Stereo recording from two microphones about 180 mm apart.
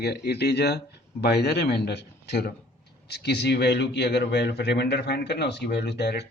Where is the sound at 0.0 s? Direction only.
65° left (ahead or behind).